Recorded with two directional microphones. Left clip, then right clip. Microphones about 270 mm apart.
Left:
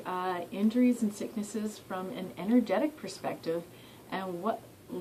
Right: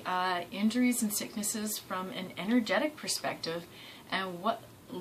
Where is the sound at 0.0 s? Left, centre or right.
Centre.